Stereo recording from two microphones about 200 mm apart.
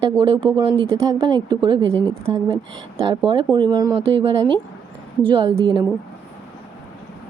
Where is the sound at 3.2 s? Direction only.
25° right (ahead or behind).